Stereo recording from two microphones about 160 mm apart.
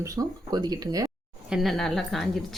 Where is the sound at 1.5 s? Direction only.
Centre (ahead or behind).